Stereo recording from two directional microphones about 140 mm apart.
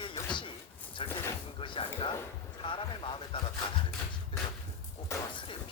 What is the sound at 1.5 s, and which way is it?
Music, 35° left (ahead or behind).